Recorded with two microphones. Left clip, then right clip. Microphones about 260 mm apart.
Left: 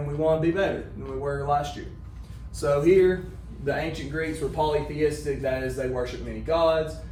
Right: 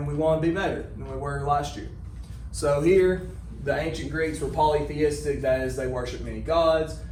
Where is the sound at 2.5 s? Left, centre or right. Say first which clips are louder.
Left 1 dB; right.